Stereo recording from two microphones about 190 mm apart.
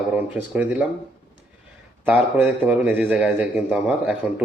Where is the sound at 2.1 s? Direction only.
5° right (ahead or behind).